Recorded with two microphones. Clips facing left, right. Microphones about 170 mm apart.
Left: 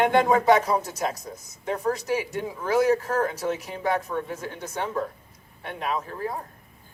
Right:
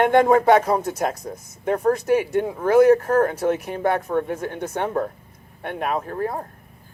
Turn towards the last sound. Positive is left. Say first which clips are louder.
# right 4 dB
turn(degrees=-55)  # may be behind; listen again after turning